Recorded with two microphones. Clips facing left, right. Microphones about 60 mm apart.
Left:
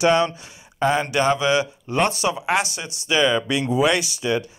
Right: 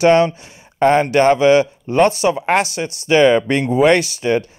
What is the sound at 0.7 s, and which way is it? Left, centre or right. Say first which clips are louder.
Speech: right 7 dB; right.